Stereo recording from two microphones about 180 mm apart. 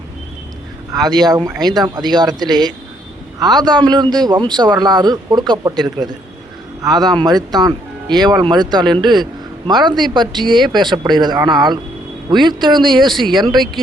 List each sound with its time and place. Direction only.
1.0 s a man's voice: 20° right (ahead or behind)
12.8 s speech: centre (ahead or behind)
13.3 s a man's voice: 25° right (ahead or behind)